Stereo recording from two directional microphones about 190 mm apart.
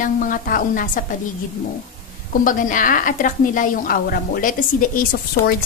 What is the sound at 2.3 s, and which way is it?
A woman's voice, 45° left (ahead or behind).